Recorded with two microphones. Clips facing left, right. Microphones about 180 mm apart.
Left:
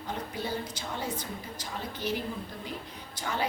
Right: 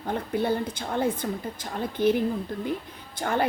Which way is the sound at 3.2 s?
55° right (ahead or behind).